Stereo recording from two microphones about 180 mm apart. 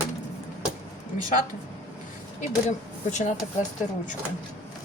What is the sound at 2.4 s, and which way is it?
Speech, 40° left (ahead or behind).